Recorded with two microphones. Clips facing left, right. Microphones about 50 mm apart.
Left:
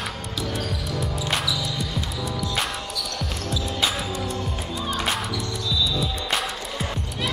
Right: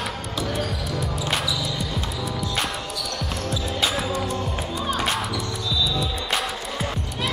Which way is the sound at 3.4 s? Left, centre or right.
Centre.